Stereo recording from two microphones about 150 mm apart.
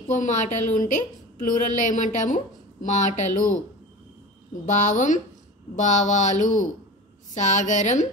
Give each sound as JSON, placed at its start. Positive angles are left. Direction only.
{"t": 0.1, "sound": "a woman's voice", "side_deg": 55}
{"t": 4.6, "sound": "a woman's voice", "side_deg": 55}